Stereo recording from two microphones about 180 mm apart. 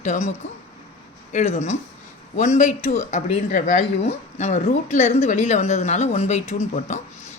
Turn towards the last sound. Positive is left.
turn(degrees=40)  # may be behind; listen again after turning